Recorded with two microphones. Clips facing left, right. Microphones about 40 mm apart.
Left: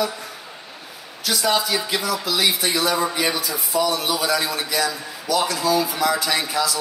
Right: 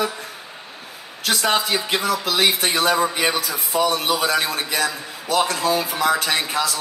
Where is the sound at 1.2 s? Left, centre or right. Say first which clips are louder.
Right 1 dB; right.